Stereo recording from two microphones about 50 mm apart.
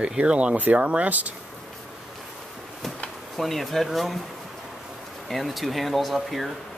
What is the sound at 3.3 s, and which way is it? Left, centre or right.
Speech, centre.